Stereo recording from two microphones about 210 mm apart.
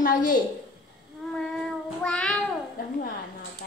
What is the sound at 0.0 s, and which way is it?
Speech, 40° left (ahead or behind).